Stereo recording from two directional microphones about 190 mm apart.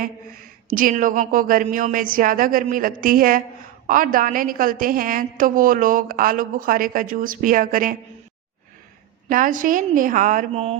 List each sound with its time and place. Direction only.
0.7 s a woman's voice: 45° right (ahead or behind)
9.3 s a woman's voice: 45° right (ahead or behind)